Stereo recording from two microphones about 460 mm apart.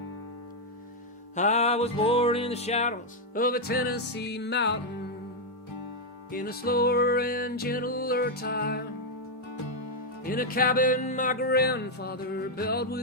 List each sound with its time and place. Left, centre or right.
1.4 s music: centre
6.3 s music: centre
10.2 s music: centre